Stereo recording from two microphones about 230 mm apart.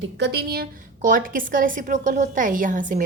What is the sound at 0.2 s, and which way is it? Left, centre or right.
A woman's voice, right.